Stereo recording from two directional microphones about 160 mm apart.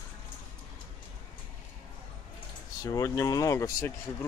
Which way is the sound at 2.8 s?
20° left (ahead or behind).